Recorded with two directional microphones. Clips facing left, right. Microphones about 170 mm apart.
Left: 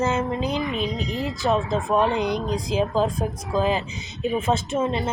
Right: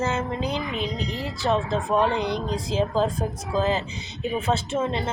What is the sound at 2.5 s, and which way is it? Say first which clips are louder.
A woman's voice: even; 15° left (ahead or behind).